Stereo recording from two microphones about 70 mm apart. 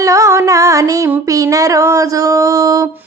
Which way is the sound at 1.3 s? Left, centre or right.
Right.